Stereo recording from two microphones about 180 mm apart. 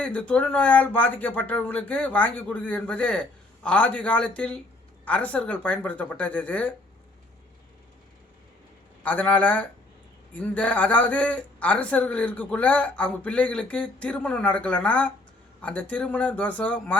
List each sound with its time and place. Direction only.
0.0 s a man's voice: 5° left (ahead or behind)
9.0 s a man's voice: 10° left (ahead or behind)